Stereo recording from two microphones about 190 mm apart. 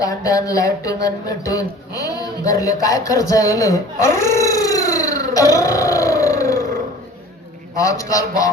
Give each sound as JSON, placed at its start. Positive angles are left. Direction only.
{"t": 0.0, "sound": "speech", "side_deg": 20}
{"t": 4.4, "sound": "a sound", "side_deg": 20}
{"t": 7.8, "sound": "a man's voice", "side_deg": 15}